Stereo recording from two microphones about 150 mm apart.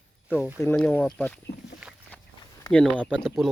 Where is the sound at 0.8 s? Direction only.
10° left (ahead or behind).